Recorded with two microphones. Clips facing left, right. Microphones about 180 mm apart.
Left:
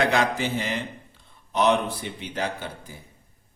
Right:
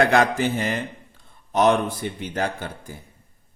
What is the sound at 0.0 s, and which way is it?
A man's voice, 50° right (ahead or behind).